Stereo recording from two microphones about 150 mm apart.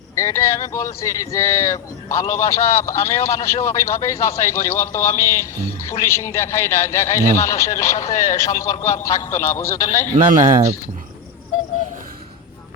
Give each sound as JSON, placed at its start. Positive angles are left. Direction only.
{"t": 0.2, "sound": "a man's voice", "side_deg": 20}
{"t": 10.2, "sound": "speech", "side_deg": -55}